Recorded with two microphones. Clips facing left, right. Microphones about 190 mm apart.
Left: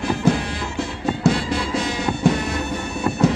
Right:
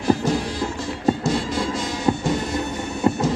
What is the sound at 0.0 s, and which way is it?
Music, 60° left (ahead or behind).